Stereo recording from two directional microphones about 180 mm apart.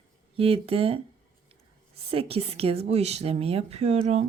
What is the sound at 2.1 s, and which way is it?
Speech, 35° right (ahead or behind).